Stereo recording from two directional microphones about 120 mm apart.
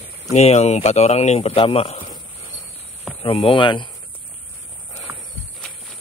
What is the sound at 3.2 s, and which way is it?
Speech, 50° left (ahead or behind).